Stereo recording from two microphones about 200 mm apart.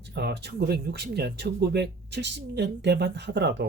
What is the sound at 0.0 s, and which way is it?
Speech, 55° right (ahead or behind).